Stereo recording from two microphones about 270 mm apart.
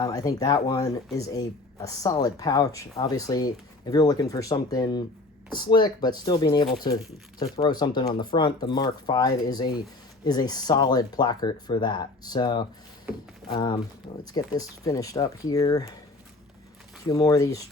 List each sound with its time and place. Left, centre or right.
0.0 s speech: centre
17.1 s speech: centre